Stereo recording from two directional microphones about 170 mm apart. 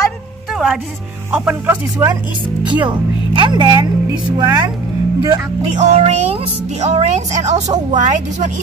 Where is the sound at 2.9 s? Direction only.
25° right (ahead or behind).